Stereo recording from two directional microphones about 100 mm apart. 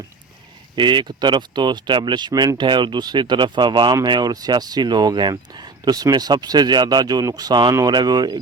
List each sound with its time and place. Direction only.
0.8 s speech: 50° right (ahead or behind)